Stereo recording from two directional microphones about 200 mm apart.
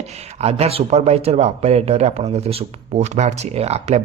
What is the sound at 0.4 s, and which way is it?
Speech, 30° right (ahead or behind).